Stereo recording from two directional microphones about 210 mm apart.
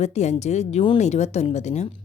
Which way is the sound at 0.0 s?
35° left (ahead or behind).